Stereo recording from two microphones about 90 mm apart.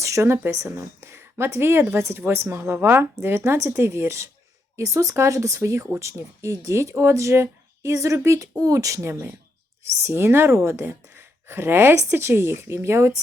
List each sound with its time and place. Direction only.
0.0 s a woman's voice: 30° right (ahead or behind)